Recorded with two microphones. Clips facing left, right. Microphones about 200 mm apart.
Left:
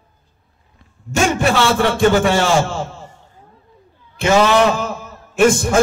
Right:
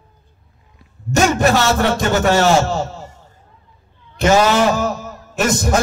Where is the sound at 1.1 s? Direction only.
40° right (ahead or behind).